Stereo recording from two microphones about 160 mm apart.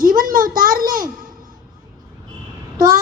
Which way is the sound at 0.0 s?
60° right (ahead or behind).